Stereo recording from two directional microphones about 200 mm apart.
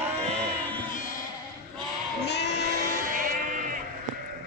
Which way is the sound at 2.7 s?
40° right (ahead or behind).